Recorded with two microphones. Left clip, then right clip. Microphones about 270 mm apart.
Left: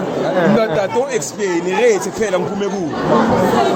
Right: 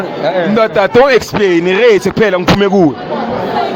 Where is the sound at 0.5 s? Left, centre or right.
Right.